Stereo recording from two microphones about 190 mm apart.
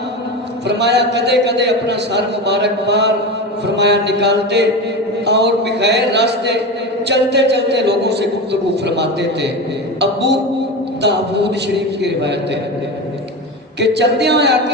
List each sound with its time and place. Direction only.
0.7 s a man's voice: 65° right (ahead or behind)
13.7 s a man's voice: 65° right (ahead or behind)